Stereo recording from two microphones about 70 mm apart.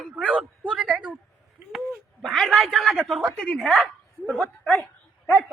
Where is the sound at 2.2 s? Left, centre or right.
Centre.